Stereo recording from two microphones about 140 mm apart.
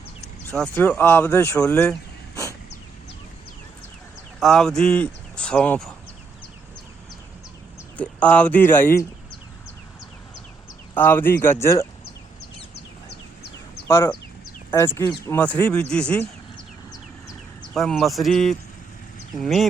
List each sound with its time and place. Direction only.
0.5 s speech: 10° left (ahead or behind)
4.4 s speech: centre (ahead or behind)
7.9 s speech: 10° left (ahead or behind)
10.9 s speech: 15° left (ahead or behind)
13.8 s speech: 20° left (ahead or behind)
17.7 s speech: centre (ahead or behind)